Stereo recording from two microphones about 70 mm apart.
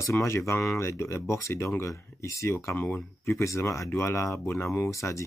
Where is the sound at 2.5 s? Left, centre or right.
Left.